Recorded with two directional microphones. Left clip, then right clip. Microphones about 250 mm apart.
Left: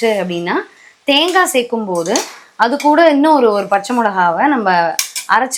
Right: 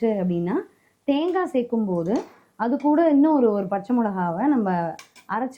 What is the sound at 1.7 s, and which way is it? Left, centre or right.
Speech, left.